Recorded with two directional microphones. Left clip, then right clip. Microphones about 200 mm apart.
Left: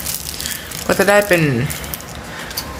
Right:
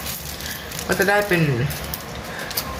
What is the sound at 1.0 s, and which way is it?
Speech, 60° left (ahead or behind).